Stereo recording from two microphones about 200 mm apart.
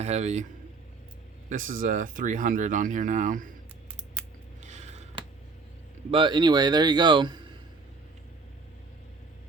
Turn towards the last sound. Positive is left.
turn(degrees=-25)  # may be behind; listen again after turning